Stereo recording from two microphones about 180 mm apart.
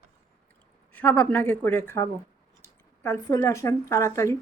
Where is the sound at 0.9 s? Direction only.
10° left (ahead or behind).